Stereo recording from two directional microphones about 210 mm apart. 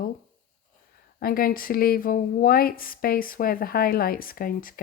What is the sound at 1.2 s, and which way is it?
Speech, 45° left (ahead or behind).